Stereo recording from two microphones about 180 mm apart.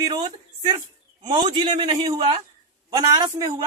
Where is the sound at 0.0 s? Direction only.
25° right (ahead or behind).